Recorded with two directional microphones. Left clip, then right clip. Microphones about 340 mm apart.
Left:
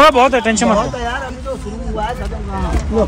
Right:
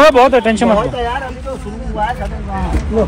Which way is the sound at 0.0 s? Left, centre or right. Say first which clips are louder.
Right 2 dB; centre.